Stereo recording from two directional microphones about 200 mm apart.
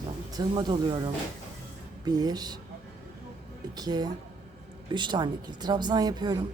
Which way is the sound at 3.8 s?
20° right (ahead or behind).